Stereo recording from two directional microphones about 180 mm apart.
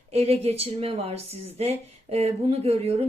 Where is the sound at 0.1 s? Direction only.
35° right (ahead or behind).